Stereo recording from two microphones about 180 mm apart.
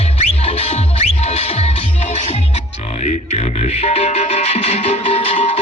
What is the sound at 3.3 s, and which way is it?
Music, 35° left (ahead or behind).